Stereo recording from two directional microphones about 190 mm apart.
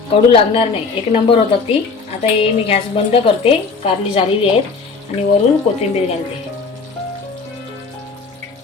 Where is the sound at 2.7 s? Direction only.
30° left (ahead or behind).